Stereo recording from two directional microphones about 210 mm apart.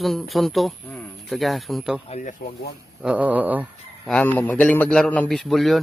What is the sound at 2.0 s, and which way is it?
Speech, 35° left (ahead or behind).